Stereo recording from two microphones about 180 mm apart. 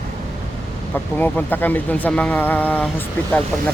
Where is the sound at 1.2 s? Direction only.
10° left (ahead or behind).